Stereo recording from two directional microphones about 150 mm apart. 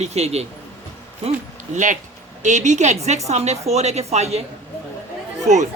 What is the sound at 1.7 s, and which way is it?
Speech, 55° right (ahead or behind).